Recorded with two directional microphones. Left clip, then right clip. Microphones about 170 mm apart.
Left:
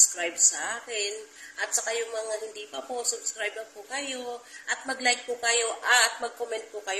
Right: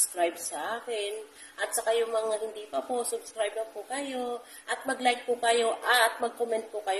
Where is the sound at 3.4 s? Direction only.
15° right (ahead or behind).